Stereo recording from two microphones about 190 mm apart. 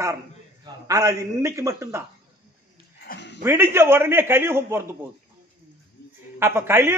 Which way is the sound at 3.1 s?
50° left (ahead or behind).